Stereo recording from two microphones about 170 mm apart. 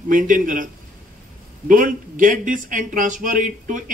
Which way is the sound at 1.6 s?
55° right (ahead or behind).